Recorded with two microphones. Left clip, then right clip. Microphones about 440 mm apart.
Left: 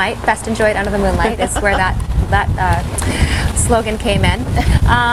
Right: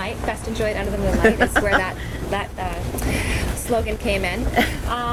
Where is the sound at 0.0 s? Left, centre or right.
Left.